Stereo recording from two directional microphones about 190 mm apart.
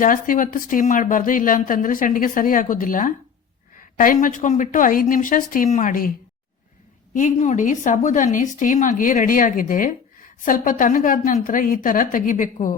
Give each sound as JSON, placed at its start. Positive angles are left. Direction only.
{"t": 0.0, "sound": "speech", "side_deg": 45}
{"t": 7.1, "sound": "a woman's voice", "side_deg": 40}